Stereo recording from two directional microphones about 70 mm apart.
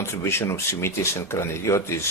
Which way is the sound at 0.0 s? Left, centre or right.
Left.